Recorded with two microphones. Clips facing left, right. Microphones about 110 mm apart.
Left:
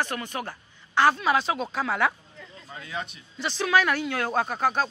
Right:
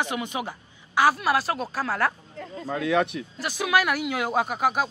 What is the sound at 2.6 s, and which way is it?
Speech, 75° right (ahead or behind).